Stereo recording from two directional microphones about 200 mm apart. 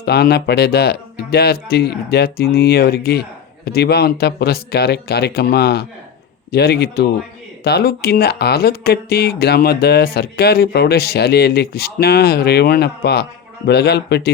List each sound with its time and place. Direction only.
0.0 s a man's voice: 55° left (ahead or behind)